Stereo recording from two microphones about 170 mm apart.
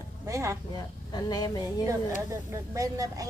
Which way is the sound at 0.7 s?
25° left (ahead or behind).